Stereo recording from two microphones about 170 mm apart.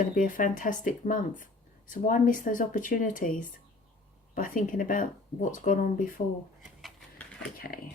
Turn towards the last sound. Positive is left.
turn(degrees=50)  # may be behind; listen again after turning